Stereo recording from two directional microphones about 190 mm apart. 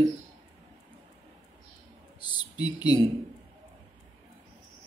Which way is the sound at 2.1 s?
20° left (ahead or behind).